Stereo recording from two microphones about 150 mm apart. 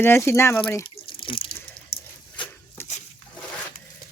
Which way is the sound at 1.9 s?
35° left (ahead or behind).